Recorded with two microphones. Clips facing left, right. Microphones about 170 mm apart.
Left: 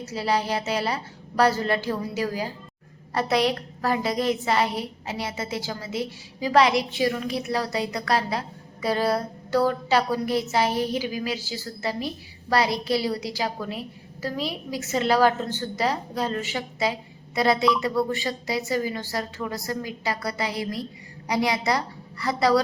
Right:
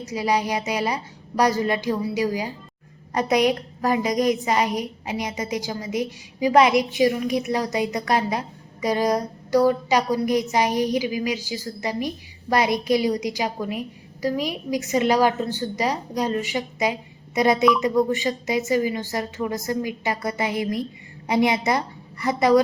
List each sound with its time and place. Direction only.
0.0 s a woman's voice: 15° right (ahead or behind)